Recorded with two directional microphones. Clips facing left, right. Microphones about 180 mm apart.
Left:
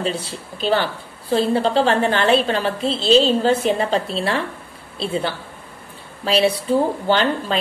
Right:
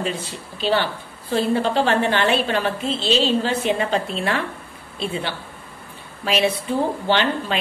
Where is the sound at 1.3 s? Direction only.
35° left (ahead or behind).